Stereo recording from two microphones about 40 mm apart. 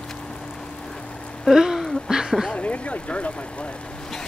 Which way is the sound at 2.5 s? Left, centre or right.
Left.